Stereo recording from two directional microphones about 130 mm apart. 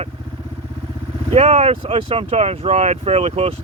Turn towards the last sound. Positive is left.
turn(degrees=-55)  # may be behind; listen again after turning